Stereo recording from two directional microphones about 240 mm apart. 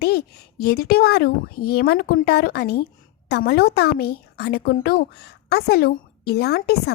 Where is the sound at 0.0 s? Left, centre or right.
Left.